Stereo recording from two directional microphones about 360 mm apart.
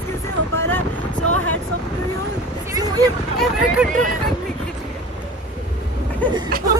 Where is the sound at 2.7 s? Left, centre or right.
Centre.